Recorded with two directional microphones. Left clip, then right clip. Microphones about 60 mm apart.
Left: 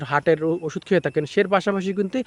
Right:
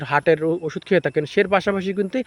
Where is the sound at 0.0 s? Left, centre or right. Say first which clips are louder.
Right 2 dB; left.